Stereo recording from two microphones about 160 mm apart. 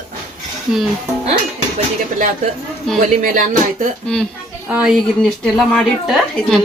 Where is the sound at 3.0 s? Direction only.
50° right (ahead or behind).